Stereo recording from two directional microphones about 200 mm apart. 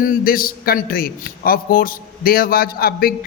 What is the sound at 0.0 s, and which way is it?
A man's voice, 45° left (ahead or behind).